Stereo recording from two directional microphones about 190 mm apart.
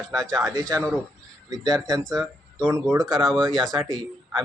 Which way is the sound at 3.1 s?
Centre (ahead or behind).